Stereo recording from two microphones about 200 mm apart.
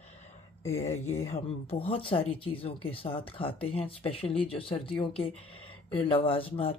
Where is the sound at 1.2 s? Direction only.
30° left (ahead or behind).